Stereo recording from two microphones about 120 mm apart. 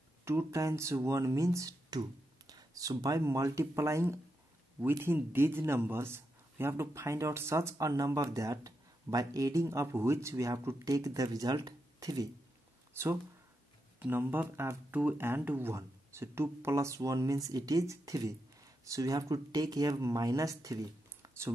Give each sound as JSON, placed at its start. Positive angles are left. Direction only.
{"t": 0.2, "sound": "a man's voice", "side_deg": -20}